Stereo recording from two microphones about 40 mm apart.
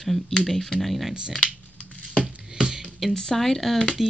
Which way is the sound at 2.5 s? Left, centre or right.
Centre.